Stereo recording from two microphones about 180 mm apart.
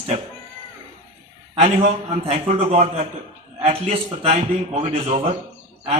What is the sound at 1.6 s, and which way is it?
A man's voice, 40° right (ahead or behind).